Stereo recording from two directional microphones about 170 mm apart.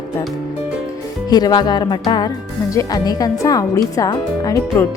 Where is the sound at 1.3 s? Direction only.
25° left (ahead or behind).